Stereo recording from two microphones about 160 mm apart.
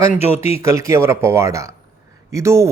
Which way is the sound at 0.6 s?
20° right (ahead or behind).